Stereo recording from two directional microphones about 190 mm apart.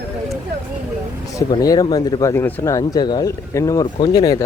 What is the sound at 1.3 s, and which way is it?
Speech, 20° left (ahead or behind).